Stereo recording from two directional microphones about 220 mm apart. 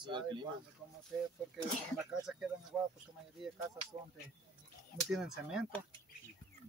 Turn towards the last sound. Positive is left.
turn(degrees=0)  # may be behind; listen again after turning